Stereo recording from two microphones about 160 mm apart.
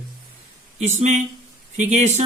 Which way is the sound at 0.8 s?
45° right (ahead or behind).